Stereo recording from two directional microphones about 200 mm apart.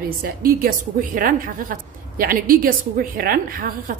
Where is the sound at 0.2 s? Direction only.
45° right (ahead or behind).